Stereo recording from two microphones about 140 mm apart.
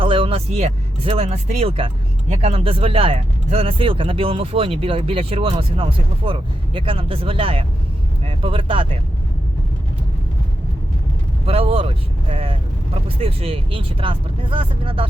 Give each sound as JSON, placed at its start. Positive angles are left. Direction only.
{"t": 0.0, "sound": "speech", "side_deg": -40}
{"t": 11.4, "sound": "speech", "side_deg": -45}